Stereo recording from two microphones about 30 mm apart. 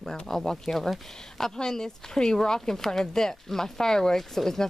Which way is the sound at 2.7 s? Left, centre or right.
Centre.